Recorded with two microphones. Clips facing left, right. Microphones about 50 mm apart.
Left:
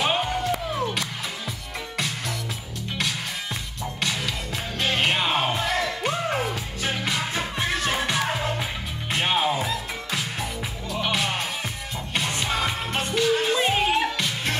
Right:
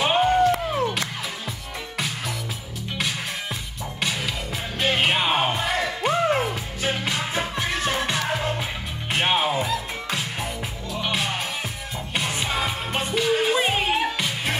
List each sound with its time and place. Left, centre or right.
0.0 s music: right
4.7 s music: centre
9.3 s music: centre
10.9 s music: centre